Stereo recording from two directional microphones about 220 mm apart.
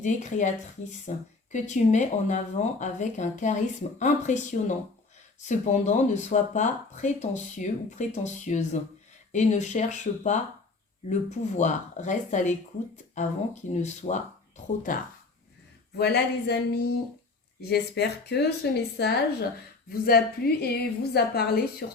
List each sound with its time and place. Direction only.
0.0 s speech: 35° left (ahead or behind)
16.0 s a woman's voice: 50° left (ahead or behind)